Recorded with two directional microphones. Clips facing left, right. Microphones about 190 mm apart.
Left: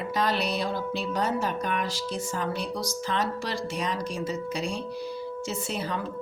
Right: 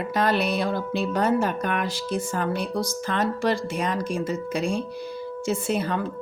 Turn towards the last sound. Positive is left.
turn(degrees=-55)  # may be behind; listen again after turning